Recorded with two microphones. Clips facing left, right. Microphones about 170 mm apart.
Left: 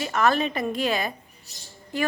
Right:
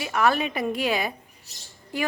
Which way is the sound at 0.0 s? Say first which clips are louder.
Left 1 dB; 10° right (ahead or behind).